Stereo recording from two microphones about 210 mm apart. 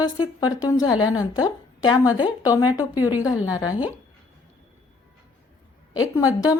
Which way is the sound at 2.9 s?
10° right (ahead or behind).